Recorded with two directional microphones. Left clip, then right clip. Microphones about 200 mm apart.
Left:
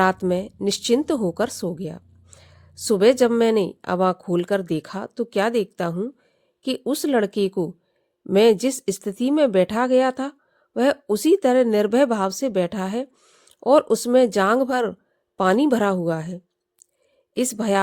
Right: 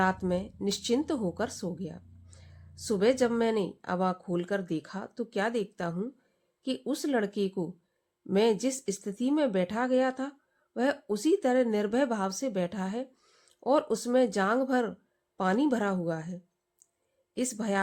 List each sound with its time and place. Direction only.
0.0 s speech: 40° left (ahead or behind)